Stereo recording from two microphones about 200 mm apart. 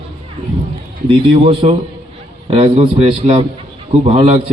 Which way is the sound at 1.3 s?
25° right (ahead or behind).